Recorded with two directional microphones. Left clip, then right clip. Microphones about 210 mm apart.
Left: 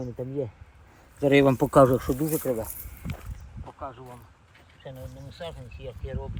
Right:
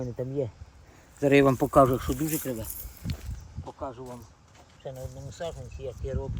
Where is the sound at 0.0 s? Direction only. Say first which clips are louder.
Right 1 dB; 15° left (ahead or behind).